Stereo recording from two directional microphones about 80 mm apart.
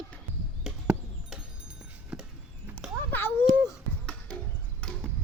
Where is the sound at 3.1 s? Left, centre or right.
Left.